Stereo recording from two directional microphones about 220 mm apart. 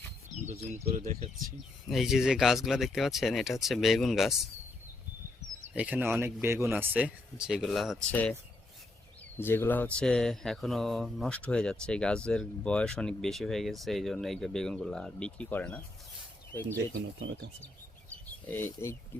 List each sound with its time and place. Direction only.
0.4 s bird: 30° right (ahead or behind)
0.9 s speech: 35° right (ahead or behind)
1.9 s speech: centre (ahead or behind)
5.7 s speech: 5° right (ahead or behind)
9.4 s speech: 10° left (ahead or behind)
18.3 s speech: 10° left (ahead or behind)